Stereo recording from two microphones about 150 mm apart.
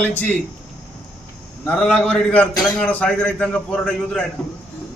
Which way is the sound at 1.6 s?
5° left (ahead or behind).